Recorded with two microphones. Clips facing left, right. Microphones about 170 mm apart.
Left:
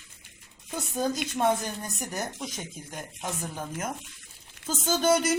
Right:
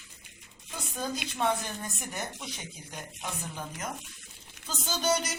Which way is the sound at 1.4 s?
40° left (ahead or behind).